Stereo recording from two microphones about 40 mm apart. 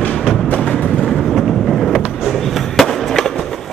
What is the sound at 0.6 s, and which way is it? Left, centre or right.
Train, left.